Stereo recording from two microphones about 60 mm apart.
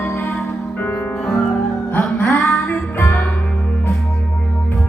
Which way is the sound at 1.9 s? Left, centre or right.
Left.